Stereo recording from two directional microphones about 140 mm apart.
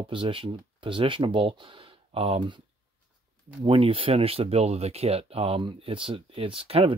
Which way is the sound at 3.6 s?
40° right (ahead or behind).